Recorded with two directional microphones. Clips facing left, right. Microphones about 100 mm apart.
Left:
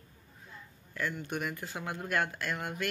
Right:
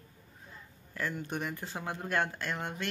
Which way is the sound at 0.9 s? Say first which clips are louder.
Even; 35° right (ahead or behind).